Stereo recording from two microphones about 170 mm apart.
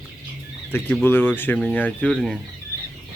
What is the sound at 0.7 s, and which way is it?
Speech, 10° left (ahead or behind).